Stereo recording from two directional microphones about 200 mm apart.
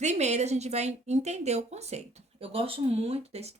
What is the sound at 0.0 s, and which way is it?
Speech, 35° right (ahead or behind).